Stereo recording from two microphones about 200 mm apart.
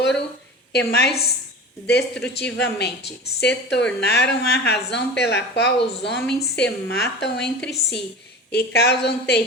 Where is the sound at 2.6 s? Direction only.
55° left (ahead or behind).